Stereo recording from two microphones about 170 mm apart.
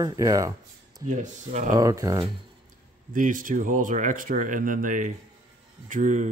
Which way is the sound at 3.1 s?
50° right (ahead or behind).